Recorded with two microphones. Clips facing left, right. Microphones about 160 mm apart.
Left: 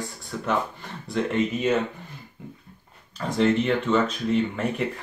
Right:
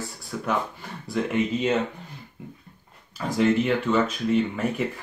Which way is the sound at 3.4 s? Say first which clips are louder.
Even; 5° right (ahead or behind).